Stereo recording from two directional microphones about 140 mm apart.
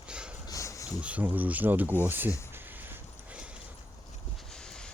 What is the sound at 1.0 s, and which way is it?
Speech, 10° right (ahead or behind).